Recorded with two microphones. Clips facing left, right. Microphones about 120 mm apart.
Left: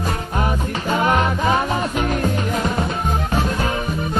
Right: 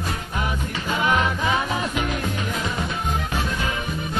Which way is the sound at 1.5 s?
50° left (ahead or behind).